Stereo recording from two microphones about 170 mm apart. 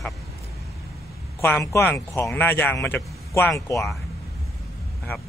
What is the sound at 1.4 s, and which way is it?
Speech, 15° left (ahead or behind).